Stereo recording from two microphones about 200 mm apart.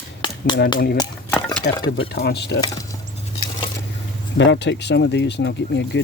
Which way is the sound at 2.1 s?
50° left (ahead or behind).